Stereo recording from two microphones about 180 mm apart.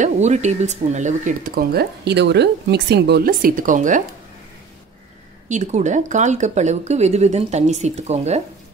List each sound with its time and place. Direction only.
0.0 s speech: 40° right (ahead or behind)
5.5 s speech: 40° right (ahead or behind)